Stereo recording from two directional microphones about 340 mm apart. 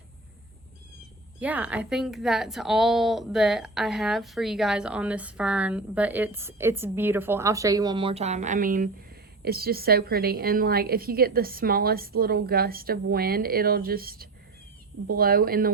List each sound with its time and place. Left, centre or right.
1.4 s a woman's voice: centre; by 15.7 s right